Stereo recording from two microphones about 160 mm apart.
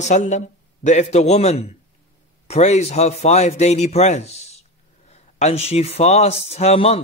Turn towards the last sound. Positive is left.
turn(degrees=40)  # may be behind; listen again after turning